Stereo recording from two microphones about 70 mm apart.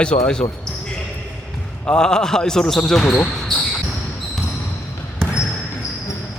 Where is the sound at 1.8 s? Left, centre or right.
Centre.